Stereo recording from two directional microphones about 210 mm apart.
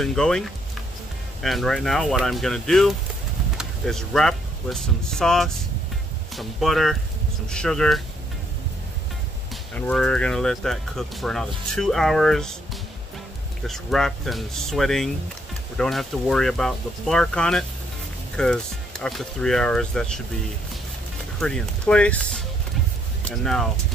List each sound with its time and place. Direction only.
0.0 s speech: 5° left (ahead or behind)
9.8 s speech: 5° left (ahead or behind)
13.6 s speech: centre (ahead or behind)
21.4 s speech: 5° left (ahead or behind)